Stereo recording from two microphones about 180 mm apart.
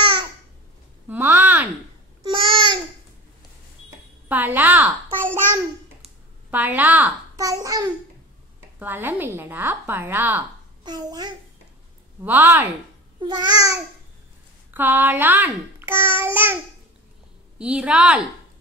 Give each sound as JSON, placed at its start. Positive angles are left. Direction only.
{"t": 0.0, "sound": "babbling", "side_deg": -25}
{"t": 1.0, "sound": "a sound", "side_deg": -10}
{"t": 2.2, "sound": "babbling", "side_deg": -30}
{"t": 4.3, "sound": "a child's voice", "side_deg": -10}
{"t": 7.3, "sound": "babbling", "side_deg": -20}
{"t": 8.7, "sound": "a child's voice", "side_deg": -10}
{"t": 10.8, "sound": "a child's voice", "side_deg": -25}
{"t": 12.2, "sound": "a child's voice", "side_deg": -10}
{"t": 13.2, "sound": "babbling", "side_deg": -25}
{"t": 14.7, "sound": "a child's voice", "side_deg": -10}
{"t": 17.6, "sound": "a woman's voice", "side_deg": -5}